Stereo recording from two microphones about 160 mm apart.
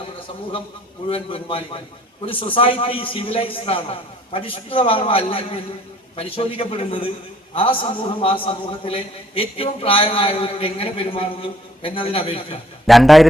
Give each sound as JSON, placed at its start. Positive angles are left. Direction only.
{"t": 1.0, "sound": "a man's voice", "side_deg": 35}
{"t": 12.9, "sound": "a man's voice", "side_deg": 0}